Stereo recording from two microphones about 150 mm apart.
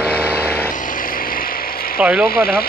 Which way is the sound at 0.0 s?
10° right (ahead or behind).